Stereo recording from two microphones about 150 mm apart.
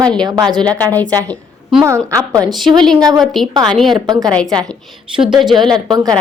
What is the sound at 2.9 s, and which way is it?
Speech, 25° right (ahead or behind).